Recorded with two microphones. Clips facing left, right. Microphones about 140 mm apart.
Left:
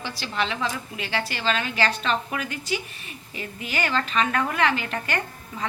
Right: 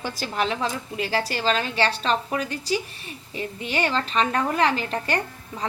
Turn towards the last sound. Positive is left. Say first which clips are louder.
# right 2 dB
turn(degrees=-35)  # may be behind; listen again after turning